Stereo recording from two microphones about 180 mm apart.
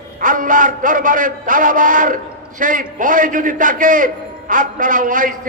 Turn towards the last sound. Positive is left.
turn(degrees=-50)  # may be behind; listen again after turning